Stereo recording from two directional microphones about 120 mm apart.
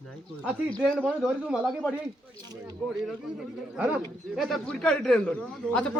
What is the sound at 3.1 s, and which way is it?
Speech, 10° right (ahead or behind).